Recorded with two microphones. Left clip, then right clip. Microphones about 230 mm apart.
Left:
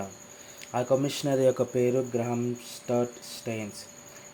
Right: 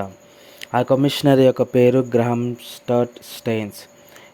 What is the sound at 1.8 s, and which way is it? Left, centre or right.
Speech, right.